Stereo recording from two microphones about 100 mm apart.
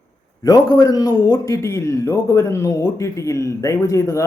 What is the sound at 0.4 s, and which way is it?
A man's voice, 40° left (ahead or behind).